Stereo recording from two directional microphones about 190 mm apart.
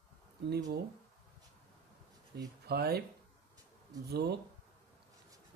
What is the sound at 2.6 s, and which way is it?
Speech, 55° right (ahead or behind).